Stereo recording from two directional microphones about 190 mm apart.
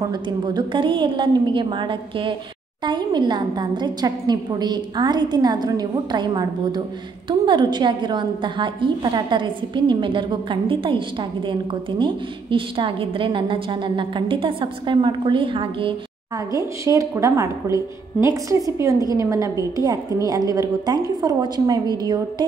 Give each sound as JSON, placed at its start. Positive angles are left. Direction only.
{"t": 0.1, "sound": "a woman's voice", "side_deg": -20}